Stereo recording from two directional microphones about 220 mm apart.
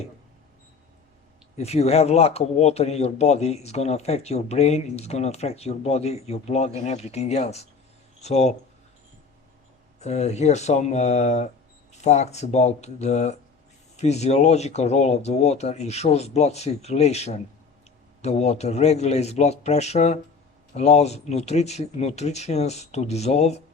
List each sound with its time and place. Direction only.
1.5 s a man's voice: 30° left (ahead or behind)
10.0 s a man's voice: 30° left (ahead or behind)